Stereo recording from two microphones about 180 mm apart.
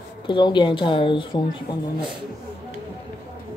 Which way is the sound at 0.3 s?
25° left (ahead or behind).